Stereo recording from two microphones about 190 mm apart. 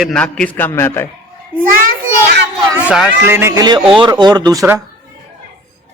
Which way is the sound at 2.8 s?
5° right (ahead or behind).